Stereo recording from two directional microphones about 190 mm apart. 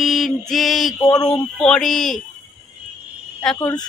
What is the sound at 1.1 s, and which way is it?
Speech, 20° left (ahead or behind).